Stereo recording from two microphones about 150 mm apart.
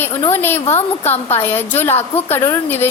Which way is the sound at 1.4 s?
15° left (ahead or behind).